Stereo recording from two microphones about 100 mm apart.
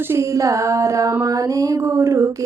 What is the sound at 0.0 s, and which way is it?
Female singing, 25° right (ahead or behind).